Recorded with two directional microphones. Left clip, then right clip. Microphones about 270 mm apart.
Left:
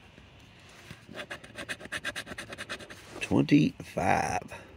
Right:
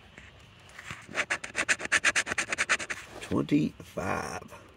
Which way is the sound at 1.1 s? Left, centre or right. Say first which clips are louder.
Right 10 dB; centre.